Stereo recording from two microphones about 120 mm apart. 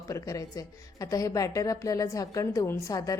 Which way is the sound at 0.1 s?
30° left (ahead or behind).